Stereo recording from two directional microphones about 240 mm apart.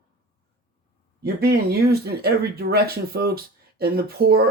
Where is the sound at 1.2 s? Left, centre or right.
Right.